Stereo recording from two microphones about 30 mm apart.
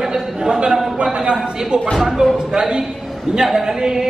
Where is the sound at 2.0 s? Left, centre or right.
Centre.